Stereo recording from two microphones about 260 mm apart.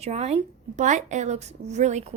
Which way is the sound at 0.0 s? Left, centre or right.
Right.